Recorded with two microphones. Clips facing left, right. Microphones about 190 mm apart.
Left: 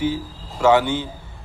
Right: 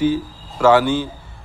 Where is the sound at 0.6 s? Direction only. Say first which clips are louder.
Right 2 dB; 25° left (ahead or behind).